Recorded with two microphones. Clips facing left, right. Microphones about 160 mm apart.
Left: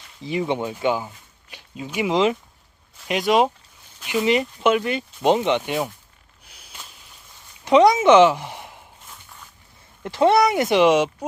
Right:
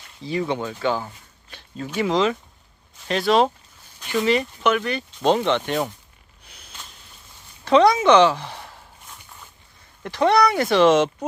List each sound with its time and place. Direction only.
0.2 s speech: 15° left (ahead or behind)
6.4 s a sound: 5° left (ahead or behind)
7.6 s a woman's voice: 20° left (ahead or behind)
10.0 s speech: 20° left (ahead or behind)